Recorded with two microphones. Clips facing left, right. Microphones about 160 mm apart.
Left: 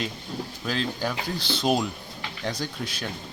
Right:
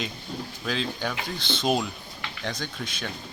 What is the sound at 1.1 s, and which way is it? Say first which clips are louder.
Speech: left 2 dB; 35° left (ahead or behind).